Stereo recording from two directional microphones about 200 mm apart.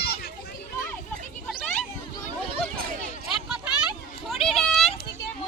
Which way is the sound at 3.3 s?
5° right (ahead or behind).